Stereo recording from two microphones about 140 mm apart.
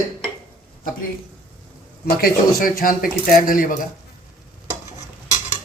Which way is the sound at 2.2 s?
90° left.